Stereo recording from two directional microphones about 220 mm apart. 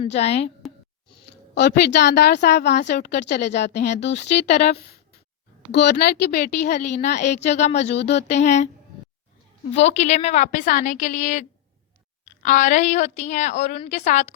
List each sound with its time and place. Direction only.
0.0 s speech: 30° left (ahead or behind)
1.3 s speech: 50° left (ahead or behind)
4.1 s a woman's voice: 30° left (ahead or behind)
5.7 s speech: 50° left (ahead or behind)
6.8 s a woman's voice: 30° left (ahead or behind)
7.9 s speech: 50° left (ahead or behind)
8.3 s a woman's voice: 30° left (ahead or behind)
9.7 s a woman's voice: 30° left (ahead or behind)